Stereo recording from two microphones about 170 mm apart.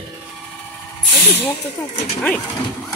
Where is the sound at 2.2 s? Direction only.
5° left (ahead or behind).